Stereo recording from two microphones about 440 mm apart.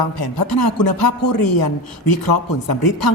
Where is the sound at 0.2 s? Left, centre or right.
Left.